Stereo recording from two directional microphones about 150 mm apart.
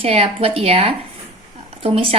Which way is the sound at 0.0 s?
40° right (ahead or behind).